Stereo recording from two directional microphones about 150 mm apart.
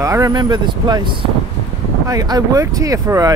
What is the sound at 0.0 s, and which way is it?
Speech, 20° right (ahead or behind).